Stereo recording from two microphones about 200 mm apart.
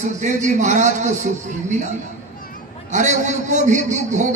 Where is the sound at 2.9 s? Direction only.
35° right (ahead or behind).